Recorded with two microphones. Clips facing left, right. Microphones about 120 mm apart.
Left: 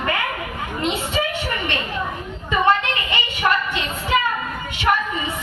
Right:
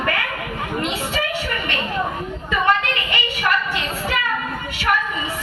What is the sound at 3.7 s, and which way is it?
Speech, 20° left (ahead or behind).